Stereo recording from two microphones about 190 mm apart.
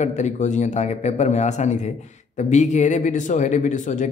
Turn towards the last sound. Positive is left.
turn(degrees=40)  # may be behind; listen again after turning